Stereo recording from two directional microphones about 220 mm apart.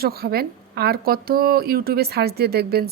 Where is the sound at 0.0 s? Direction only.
45° right (ahead or behind).